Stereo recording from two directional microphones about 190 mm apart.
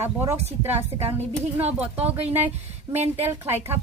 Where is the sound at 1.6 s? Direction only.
30° right (ahead or behind).